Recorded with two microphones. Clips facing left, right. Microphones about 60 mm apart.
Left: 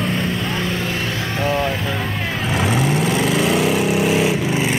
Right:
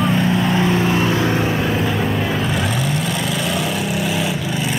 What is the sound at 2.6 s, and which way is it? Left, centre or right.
Vehicle, left.